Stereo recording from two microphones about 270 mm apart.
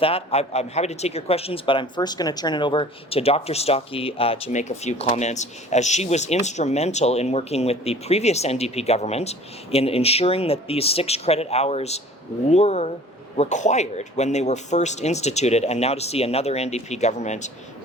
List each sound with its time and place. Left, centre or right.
0.0 s speech: left